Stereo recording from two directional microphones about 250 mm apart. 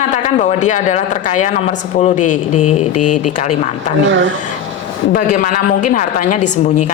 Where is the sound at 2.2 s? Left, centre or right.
Left.